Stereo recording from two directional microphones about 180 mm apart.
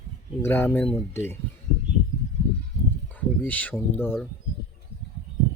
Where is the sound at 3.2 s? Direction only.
10° left (ahead or behind).